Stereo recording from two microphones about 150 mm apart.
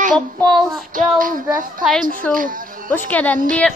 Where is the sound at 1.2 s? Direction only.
65° right (ahead or behind).